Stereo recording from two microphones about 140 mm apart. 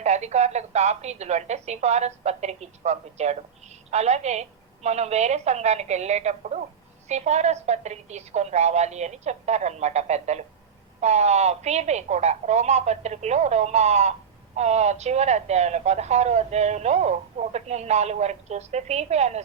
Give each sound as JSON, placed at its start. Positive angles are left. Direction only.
{"t": 0.0, "sound": "speech", "side_deg": -55}